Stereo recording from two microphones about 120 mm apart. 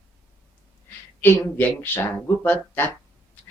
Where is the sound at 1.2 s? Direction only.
15° left (ahead or behind).